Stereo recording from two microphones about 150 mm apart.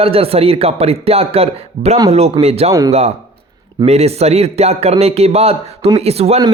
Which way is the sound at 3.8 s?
45° right (ahead or behind).